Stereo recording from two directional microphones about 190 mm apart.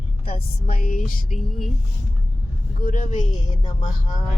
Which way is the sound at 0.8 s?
45° left (ahead or behind).